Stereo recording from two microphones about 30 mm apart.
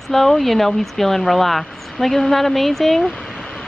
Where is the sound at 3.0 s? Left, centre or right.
Left.